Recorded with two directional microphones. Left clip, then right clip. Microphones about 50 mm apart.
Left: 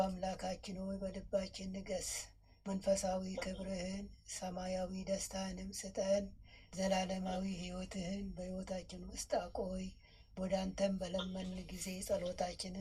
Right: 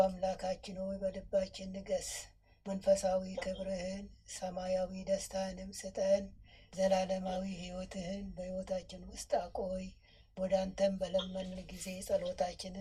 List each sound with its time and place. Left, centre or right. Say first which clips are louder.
0.0 s speech: right 6 dB; right